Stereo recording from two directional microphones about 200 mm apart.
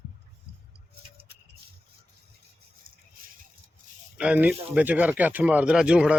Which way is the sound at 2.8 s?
45° right (ahead or behind).